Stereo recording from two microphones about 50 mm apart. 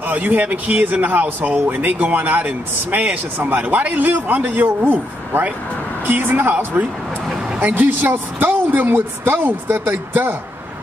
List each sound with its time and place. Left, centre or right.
0.0 s speech: right
3.3 s speech: right